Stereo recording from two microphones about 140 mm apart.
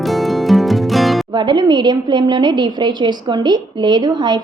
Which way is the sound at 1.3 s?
35° right (ahead or behind).